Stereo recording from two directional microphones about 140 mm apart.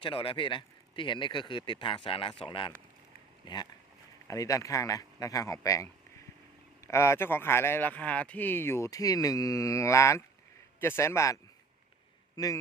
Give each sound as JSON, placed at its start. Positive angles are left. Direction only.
{"t": 0.0, "sound": "speech", "side_deg": 40}
{"t": 12.4, "sound": "speech", "side_deg": 25}